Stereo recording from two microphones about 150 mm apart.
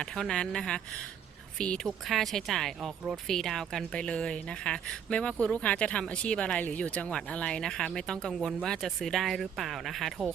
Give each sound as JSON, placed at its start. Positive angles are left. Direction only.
{"t": 0.0, "sound": "speech", "side_deg": 5}